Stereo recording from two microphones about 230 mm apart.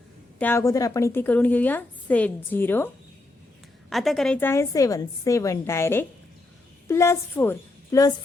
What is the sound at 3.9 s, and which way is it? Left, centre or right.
A woman's voice, centre.